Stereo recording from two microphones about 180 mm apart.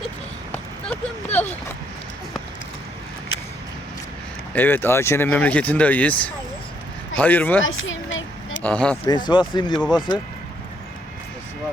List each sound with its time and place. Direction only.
0.5 s a sound: 10° left (ahead or behind)
4.5 s speech: 10° left (ahead or behind)
7.6 s vehicle: 90° left
8.6 s speech: 5° left (ahead or behind)
9.0 s speech: 25° left (ahead or behind)